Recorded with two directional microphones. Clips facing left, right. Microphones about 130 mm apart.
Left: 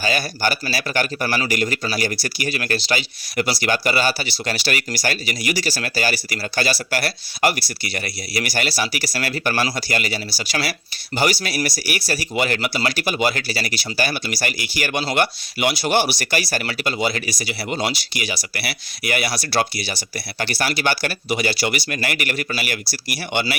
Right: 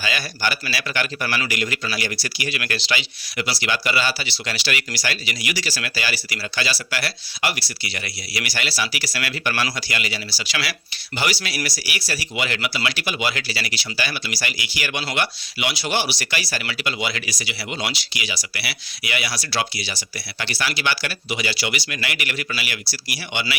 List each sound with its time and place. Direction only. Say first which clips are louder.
0.0 s speech: left 4 dB; 40° left (ahead or behind)